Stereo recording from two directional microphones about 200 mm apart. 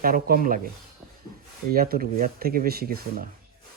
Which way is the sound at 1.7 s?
50° right (ahead or behind).